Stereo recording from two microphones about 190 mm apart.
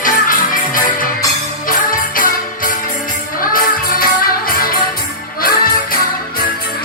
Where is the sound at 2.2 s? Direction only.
45° left (ahead or behind).